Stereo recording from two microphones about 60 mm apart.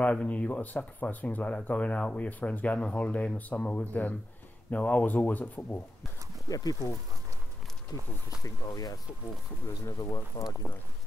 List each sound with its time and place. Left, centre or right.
0.0 s speech: left
6.5 s speech: left
7.9 s speech: left
8.5 s speech: left
9.8 s speech: left